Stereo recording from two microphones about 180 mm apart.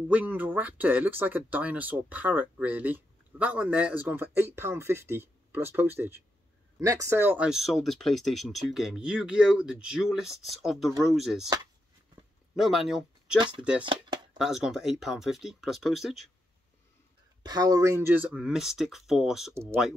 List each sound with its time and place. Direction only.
0.1 s speech: 10° right (ahead or behind)
12.5 s speech: centre (ahead or behind)
14.4 s speech: 5° right (ahead or behind)
17.5 s speech: 20° right (ahead or behind); by 20.0 s centre (ahead or behind)